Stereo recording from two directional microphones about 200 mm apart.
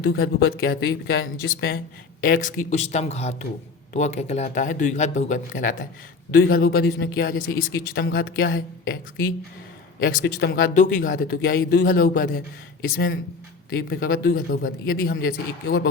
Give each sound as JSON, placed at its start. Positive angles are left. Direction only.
{"t": 0.1, "sound": "speech", "side_deg": 80}
{"t": 0.6, "sound": "speech", "side_deg": 50}
{"t": 13.7, "sound": "speech", "side_deg": 50}